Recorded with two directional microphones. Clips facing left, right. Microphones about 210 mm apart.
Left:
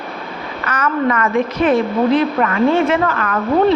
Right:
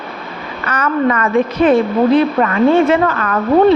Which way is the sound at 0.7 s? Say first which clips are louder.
Right 2 dB; 30° right (ahead or behind).